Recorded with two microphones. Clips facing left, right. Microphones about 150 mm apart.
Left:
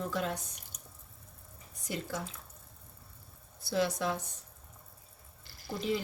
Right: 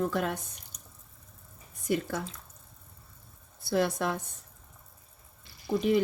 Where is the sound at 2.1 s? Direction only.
55° right (ahead or behind).